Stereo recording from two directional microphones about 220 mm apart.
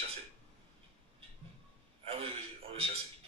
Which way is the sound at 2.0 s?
25° right (ahead or behind).